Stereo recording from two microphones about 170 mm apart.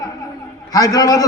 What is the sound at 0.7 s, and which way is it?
Speech, 20° left (ahead or behind).